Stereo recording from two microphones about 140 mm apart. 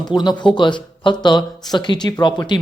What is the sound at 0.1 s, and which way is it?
Speech, 30° left (ahead or behind).